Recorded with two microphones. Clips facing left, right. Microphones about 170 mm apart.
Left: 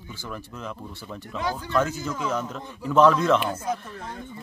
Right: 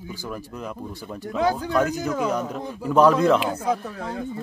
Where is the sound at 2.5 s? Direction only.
45° right (ahead or behind).